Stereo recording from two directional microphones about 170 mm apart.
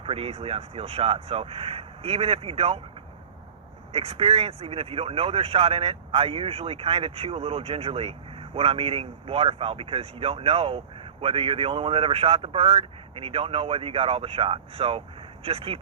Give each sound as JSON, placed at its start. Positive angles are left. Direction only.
{"t": 0.0, "sound": "speech", "side_deg": -35}
{"t": 3.9, "sound": "speech", "side_deg": -35}